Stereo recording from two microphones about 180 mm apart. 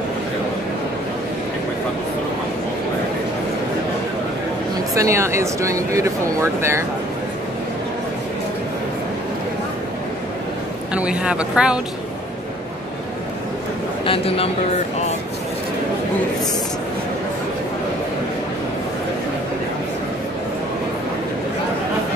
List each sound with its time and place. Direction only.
4.9 s speech: 15° right (ahead or behind)
10.9 s speech: 5° right (ahead or behind)
14.0 s speech: 30° left (ahead or behind)